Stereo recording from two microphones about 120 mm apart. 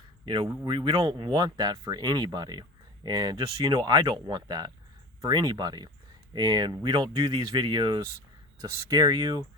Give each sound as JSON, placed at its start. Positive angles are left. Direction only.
{"t": 0.3, "sound": "speech", "side_deg": -40}